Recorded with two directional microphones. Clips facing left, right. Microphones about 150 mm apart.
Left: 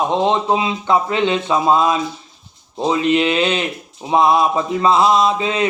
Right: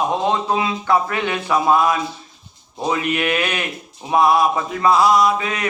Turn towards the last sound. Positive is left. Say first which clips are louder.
# left 1 dB
turn(degrees=25)  # may be behind; listen again after turning